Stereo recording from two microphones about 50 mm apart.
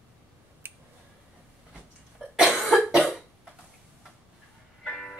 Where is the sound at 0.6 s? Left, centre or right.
Right.